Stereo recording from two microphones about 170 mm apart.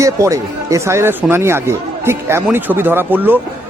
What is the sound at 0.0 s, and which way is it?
Speech, 20° right (ahead or behind).